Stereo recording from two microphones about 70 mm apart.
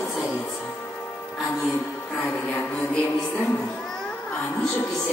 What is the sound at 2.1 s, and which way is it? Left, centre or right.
Music, left.